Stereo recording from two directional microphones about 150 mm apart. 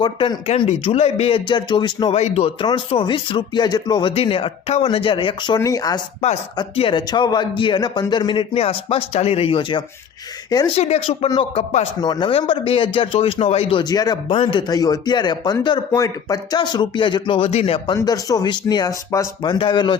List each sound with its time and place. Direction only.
0.0 s a man's voice: 35° left (ahead or behind)
2.1 s speech: 45° left (ahead or behind)
2.6 s a man's voice: 30° left (ahead or behind)
4.1 s a man's voice: 40° left (ahead or behind)
6.6 s a man's voice: 35° left (ahead or behind)
12.0 s a man's voice: 30° left (ahead or behind)
14.3 s a man's voice: 40° left (ahead or behind)
14.7 s a man's voice: 25° left (ahead or behind); by 17.9 s 40° left (ahead or behind)
17.9 s speech: 25° left (ahead or behind)